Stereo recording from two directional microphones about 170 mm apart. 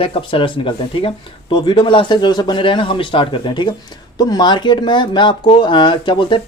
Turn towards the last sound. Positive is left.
turn(degrees=30)  # may be behind; listen again after turning